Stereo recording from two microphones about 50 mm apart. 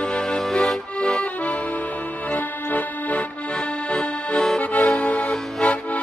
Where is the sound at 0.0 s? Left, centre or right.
Centre.